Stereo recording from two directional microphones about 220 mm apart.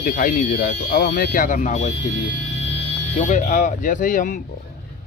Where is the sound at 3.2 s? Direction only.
35° left (ahead or behind).